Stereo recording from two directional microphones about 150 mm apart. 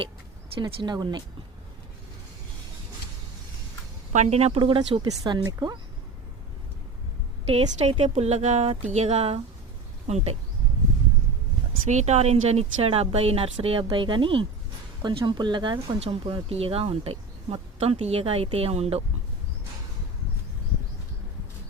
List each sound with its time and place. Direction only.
0.6 s speech: 30° right (ahead or behind)
4.1 s speech: 45° right (ahead or behind)
5.0 s speech: 25° right (ahead or behind)
7.4 s speech: 40° right (ahead or behind)
11.9 s speech: 50° right (ahead or behind)